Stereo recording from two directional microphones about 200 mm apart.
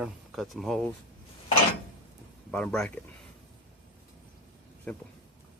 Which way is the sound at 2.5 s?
5° left (ahead or behind).